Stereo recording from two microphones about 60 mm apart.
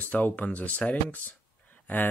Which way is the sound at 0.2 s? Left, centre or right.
Left.